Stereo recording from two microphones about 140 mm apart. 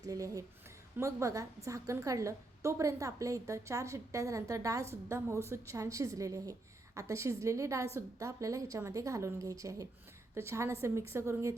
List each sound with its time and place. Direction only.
0.0 s a woman's voice: 25° right (ahead or behind)